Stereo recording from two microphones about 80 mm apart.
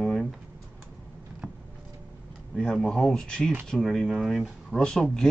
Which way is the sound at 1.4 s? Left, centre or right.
Centre.